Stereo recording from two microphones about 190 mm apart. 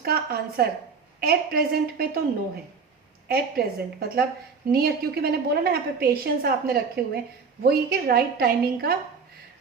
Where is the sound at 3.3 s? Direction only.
55° right (ahead or behind).